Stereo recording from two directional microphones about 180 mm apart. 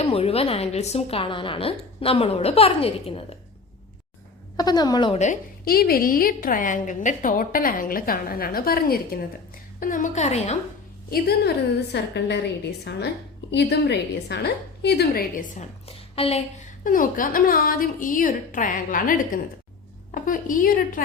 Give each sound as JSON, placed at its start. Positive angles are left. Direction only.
{"t": 0.0, "sound": "a woman's voice", "side_deg": 35}
{"t": 4.5, "sound": "a woman's voice", "side_deg": 20}
{"t": 5.2, "sound": "a woman's voice", "side_deg": 50}
{"t": 9.8, "sound": "a woman's voice", "side_deg": 45}
{"t": 11.1, "sound": "a woman's voice", "side_deg": 60}
{"t": 15.5, "sound": "a woman's voice", "side_deg": 35}
{"t": 16.8, "sound": "a woman's voice", "side_deg": 50}